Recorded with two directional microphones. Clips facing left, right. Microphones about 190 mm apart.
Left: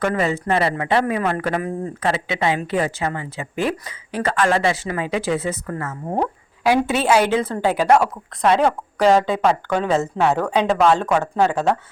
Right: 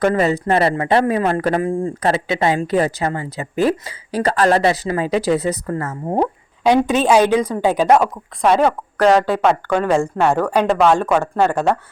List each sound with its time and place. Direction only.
0.0 s a woman's voice: 35° right (ahead or behind)
6.7 s a woman's voice: 15° right (ahead or behind)
8.4 s a woman's voice: centre (ahead or behind)